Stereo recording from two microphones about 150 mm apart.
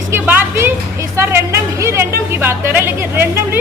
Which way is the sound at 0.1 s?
15° right (ahead or behind).